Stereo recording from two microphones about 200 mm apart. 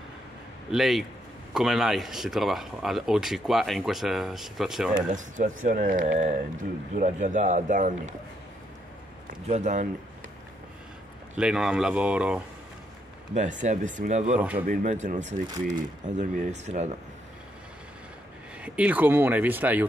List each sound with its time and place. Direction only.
0.7 s a man's voice: centre (ahead or behind)
5.1 s speech: 40° right (ahead or behind)
9.3 s speech: 35° right (ahead or behind)
11.3 s a man's voice: centre (ahead or behind)
13.3 s speech: 40° right (ahead or behind)
18.6 s speech: 5° right (ahead or behind)